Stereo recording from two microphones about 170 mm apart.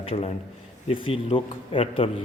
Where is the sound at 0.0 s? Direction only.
35° left (ahead or behind).